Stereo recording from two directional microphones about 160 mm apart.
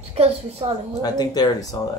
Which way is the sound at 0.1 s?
40° right (ahead or behind).